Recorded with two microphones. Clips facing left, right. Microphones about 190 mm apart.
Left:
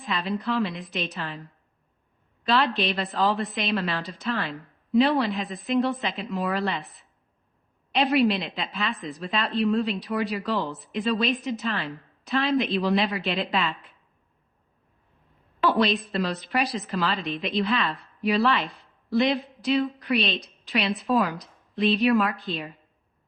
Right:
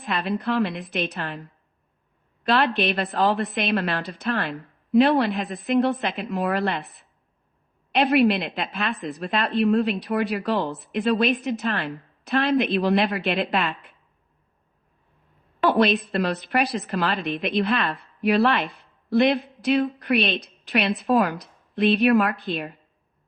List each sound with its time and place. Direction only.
0.0 s a woman's voice: 60° right (ahead or behind)
2.4 s a woman's voice: 60° right (ahead or behind)
15.6 s a woman's voice: 60° right (ahead or behind)